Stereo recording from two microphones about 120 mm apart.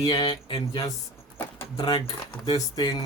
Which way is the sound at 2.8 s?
35° left (ahead or behind).